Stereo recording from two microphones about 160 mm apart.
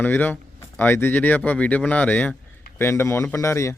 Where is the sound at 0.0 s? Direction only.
10° left (ahead or behind).